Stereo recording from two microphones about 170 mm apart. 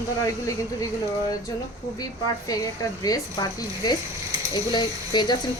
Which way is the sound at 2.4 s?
20° left (ahead or behind).